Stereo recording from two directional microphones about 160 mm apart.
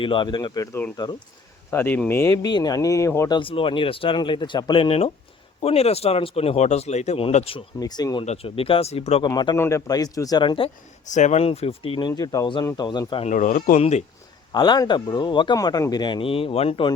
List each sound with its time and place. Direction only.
0.0 s speech: 30° left (ahead or behind)
3.3 s speech: 35° left (ahead or behind)
7.8 s speech: 25° left (ahead or behind)
8.2 s speech: 40° left (ahead or behind)
9.2 s speech: 30° left (ahead or behind)
9.6 s speech: 15° left (ahead or behind)
11.1 s speech: 45° left (ahead or behind); by 13.2 s 30° left (ahead or behind)
13.2 s speech: 50° left (ahead or behind)
14.5 s speech: 25° left (ahead or behind)